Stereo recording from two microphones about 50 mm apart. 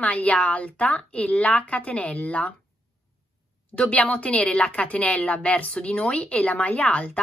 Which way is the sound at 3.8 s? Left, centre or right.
Left.